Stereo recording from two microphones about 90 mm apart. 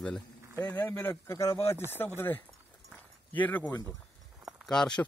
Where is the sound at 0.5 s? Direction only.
20° left (ahead or behind).